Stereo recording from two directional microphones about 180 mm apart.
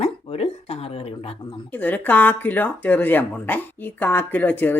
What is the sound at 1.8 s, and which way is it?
Speech, 10° left (ahead or behind).